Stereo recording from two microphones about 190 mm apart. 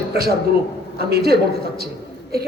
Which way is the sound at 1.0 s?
55° right (ahead or behind).